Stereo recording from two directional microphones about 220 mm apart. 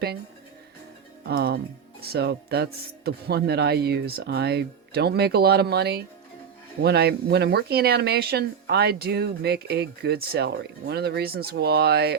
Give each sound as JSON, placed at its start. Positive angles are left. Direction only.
{"t": 1.3, "sound": "speech", "side_deg": -45}